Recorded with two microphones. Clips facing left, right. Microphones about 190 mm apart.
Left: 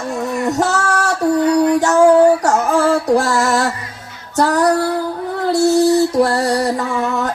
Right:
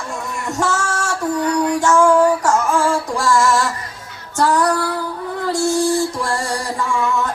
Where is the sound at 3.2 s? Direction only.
65° left (ahead or behind).